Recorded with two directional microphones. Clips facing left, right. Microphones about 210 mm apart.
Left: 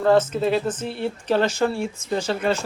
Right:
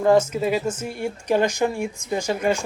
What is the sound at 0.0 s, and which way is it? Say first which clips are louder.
Speech: even; 10° right (ahead or behind).